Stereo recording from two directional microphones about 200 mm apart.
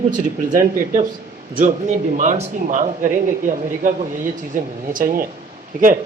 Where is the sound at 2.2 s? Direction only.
35° right (ahead or behind).